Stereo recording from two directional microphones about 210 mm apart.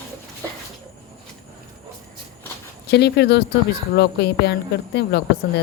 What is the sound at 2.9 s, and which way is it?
A woman's voice, 50° left (ahead or behind).